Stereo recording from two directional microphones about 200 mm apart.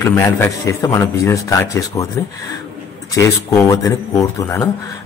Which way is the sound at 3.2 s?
15° left (ahead or behind).